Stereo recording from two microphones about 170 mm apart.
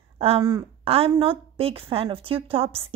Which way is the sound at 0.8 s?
35° right (ahead or behind).